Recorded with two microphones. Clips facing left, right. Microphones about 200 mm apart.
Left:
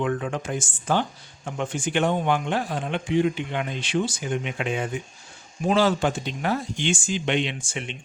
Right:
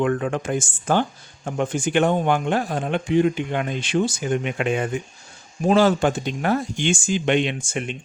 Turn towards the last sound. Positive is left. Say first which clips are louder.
# right 5 dB
turn(degrees=-45)  # may be behind; listen again after turning